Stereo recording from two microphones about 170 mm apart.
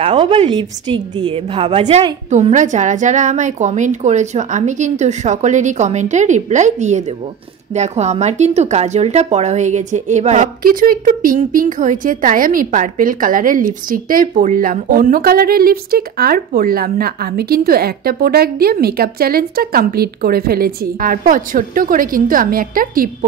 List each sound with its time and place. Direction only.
0.0 s a woman's voice: 30° right (ahead or behind); by 23.0 s 55° right (ahead or behind)